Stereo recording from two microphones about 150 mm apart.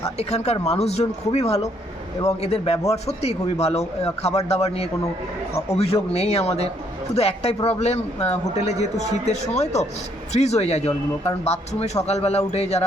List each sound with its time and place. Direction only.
0.0 s a man's voice: 45° left (ahead or behind)